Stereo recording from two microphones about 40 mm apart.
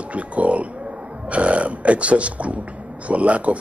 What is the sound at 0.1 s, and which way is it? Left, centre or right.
Pigeon, right.